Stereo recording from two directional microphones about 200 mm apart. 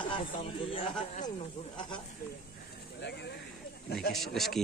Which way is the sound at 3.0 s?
60° left (ahead or behind).